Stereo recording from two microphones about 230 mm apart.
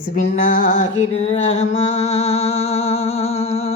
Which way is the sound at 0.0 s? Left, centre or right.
Left.